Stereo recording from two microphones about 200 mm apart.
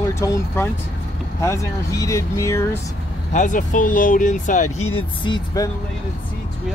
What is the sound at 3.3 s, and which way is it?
Speech, 40° left (ahead or behind).